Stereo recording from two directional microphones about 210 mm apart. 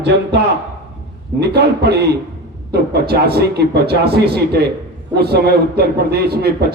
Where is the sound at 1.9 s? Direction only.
50° right (ahead or behind).